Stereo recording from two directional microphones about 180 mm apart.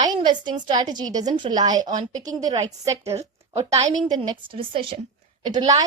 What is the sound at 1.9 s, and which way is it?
Speech, 45° right (ahead or behind).